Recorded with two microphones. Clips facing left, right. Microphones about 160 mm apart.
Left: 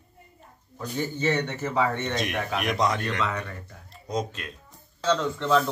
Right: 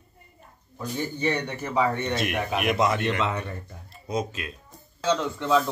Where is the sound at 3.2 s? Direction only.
25° right (ahead or behind).